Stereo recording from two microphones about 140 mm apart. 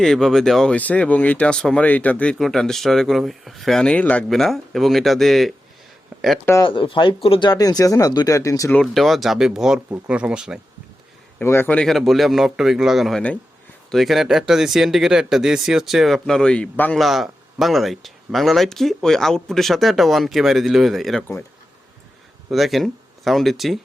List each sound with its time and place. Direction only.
0.0 s speech: 5° left (ahead or behind)
6.6 s speech: 35° left (ahead or behind); by 8.7 s 20° left (ahead or behind)
8.7 s speech: centre (ahead or behind)
11.3 s speech: 15° left (ahead or behind)
17.0 s speech: centre (ahead or behind)
22.4 s speech: centre (ahead or behind)